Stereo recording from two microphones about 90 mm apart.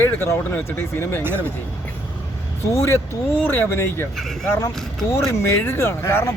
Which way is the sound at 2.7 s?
30° left (ahead or behind).